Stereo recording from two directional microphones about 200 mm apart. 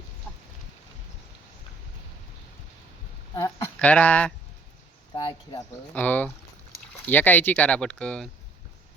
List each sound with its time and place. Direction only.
3.3 s speech: 10° left (ahead or behind)
5.1 s speech: 20° left (ahead or behind)
5.9 s speech: 10° left (ahead or behind)